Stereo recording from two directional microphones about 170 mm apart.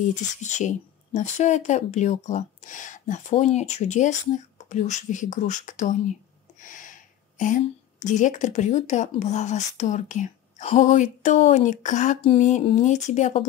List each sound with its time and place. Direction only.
0.1 s speech: 45° left (ahead or behind)